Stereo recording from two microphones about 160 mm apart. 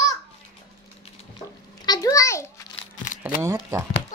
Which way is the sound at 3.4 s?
20° right (ahead or behind).